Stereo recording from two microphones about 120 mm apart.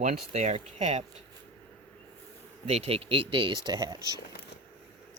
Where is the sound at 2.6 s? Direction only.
55° right (ahead or behind); by 4.2 s 35° right (ahead or behind).